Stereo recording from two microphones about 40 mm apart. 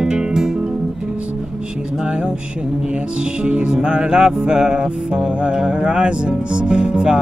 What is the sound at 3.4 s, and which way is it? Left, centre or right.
Music, right.